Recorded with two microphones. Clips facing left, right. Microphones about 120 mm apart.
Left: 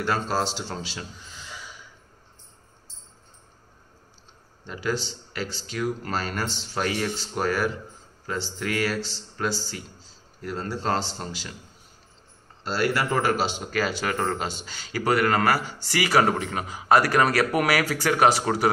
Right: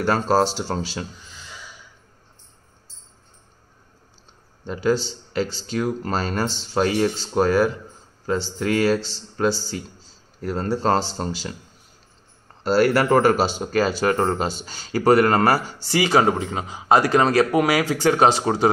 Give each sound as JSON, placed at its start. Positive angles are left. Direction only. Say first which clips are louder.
{"t": 0.0, "sound": "speech", "louder": "right 7 dB", "side_deg": -40}
{"t": 4.6, "sound": "a man's voice", "louder": "right 7 dB", "side_deg": -30}
{"t": 10.4, "sound": "speech", "louder": "right 7 dB", "side_deg": -40}
{"t": 12.6, "sound": "a man's voice", "louder": "right 8 dB", "side_deg": -45}